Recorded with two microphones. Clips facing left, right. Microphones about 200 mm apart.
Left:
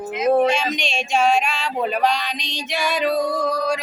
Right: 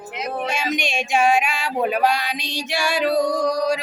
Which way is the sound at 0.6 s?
10° right (ahead or behind).